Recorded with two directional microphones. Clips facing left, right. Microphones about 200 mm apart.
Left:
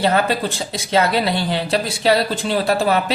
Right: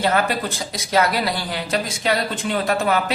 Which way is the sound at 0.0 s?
30° left (ahead or behind).